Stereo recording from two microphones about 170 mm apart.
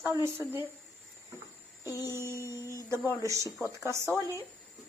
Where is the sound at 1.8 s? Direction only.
20° left (ahead or behind).